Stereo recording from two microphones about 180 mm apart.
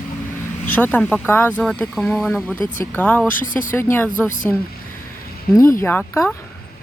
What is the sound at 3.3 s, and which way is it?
Speech, 50° left (ahead or behind).